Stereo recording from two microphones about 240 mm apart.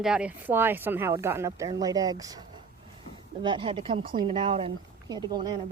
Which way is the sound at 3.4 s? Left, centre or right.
Centre.